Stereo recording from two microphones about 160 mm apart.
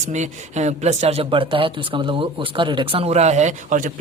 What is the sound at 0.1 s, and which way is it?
Speech, 45° right (ahead or behind).